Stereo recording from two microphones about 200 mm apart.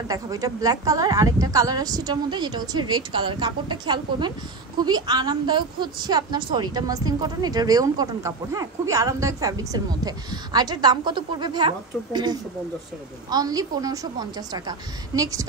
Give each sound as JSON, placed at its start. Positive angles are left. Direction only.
{"t": 0.1, "sound": "a woman's voice", "side_deg": -15}